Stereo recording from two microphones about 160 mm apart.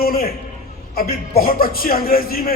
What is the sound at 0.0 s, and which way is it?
A man's voice, 65° left (ahead or behind).